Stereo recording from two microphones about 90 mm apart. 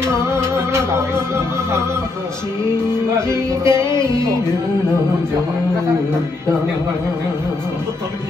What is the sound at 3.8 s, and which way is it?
Music, 55° left (ahead or behind).